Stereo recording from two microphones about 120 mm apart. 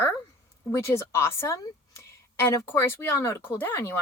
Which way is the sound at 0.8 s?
20° left (ahead or behind).